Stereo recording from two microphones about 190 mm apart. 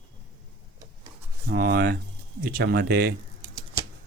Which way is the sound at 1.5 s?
55° right (ahead or behind).